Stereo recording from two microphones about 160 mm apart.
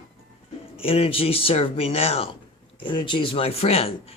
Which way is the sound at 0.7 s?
35° left (ahead or behind).